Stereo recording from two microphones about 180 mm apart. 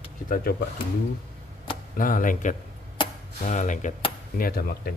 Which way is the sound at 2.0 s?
50° left (ahead or behind).